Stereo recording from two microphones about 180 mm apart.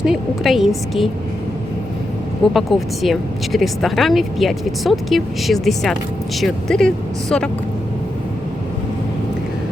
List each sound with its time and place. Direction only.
0.0 s speech: centre (ahead or behind)
2.5 s speech: centre (ahead or behind)